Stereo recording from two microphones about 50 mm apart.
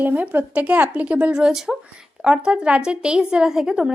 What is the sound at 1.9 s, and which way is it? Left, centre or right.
A woman's voice, centre.